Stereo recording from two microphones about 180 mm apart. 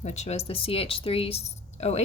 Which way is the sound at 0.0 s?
40° left (ahead or behind).